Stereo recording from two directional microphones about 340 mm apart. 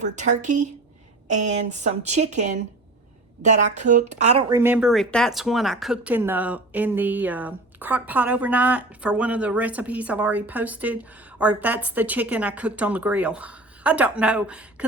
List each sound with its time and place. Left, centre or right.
0.0 s a woman's voice: right; by 14.8 s centre